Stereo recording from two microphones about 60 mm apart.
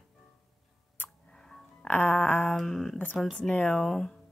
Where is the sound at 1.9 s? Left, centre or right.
Left.